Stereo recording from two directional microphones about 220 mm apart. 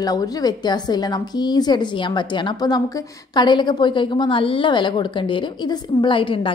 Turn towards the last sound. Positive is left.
turn(degrees=25)  # may be behind; listen again after turning